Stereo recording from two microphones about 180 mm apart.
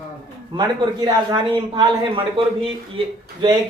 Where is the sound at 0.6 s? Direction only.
20° right (ahead or behind).